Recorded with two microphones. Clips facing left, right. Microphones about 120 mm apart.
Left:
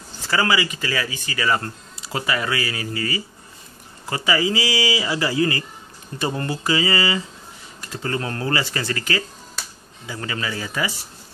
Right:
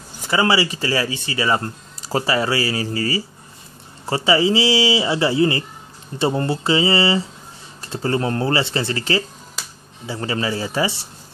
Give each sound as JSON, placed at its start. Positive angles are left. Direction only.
{"t": 0.2, "sound": "speech", "side_deg": -20}
{"t": 2.0, "sound": "speech", "side_deg": -40}